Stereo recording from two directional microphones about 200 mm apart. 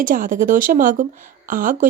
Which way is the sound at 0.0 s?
40° right (ahead or behind).